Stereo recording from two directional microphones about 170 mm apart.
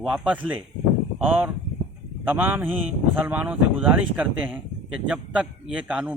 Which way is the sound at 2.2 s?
10° right (ahead or behind).